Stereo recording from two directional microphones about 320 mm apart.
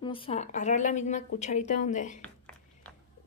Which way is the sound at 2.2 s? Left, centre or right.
Centre.